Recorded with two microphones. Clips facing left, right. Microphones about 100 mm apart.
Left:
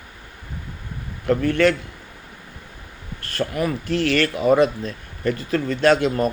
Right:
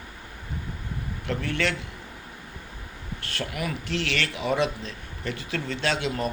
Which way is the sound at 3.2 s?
40° left (ahead or behind).